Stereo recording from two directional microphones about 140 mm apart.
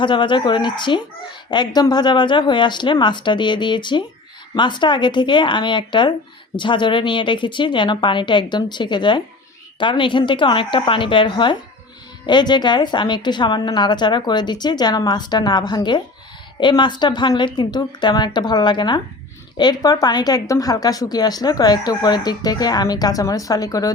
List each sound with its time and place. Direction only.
0.0 s a child's voice: 35° left (ahead or behind)